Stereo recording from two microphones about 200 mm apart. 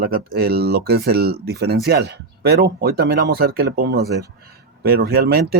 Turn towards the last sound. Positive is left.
turn(degrees=-50)  # may be behind; listen again after turning